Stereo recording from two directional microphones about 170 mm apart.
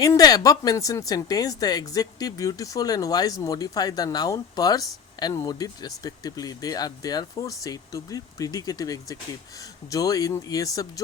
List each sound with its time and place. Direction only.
0.0 s speech: 20° left (ahead or behind)